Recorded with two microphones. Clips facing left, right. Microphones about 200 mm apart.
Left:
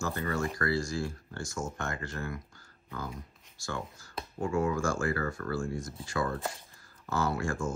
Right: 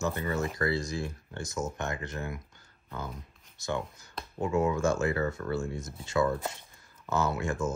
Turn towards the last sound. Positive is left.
turn(degrees=-20)  # may be behind; listen again after turning